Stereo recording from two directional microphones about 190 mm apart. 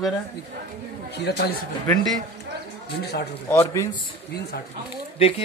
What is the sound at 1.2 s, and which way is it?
Speech, 55° left (ahead or behind).